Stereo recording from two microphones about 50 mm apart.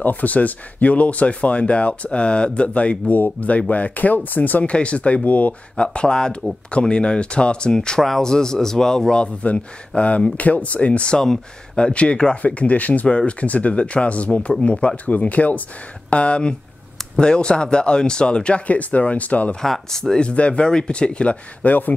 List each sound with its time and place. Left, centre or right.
0.0 s speech: left
5.8 s a man's voice: centre
19.6 s a man's voice: centre
20.2 s speech: left